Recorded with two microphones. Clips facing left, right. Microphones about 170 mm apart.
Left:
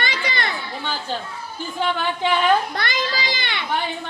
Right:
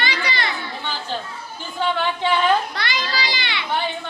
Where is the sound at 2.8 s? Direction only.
50° left (ahead or behind).